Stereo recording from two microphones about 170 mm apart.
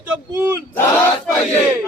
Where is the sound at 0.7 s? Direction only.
10° left (ahead or behind).